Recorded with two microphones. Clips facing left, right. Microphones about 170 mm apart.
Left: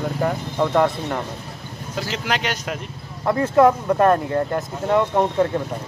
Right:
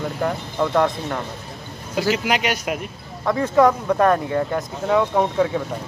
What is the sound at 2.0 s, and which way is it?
Speech, 10° right (ahead or behind).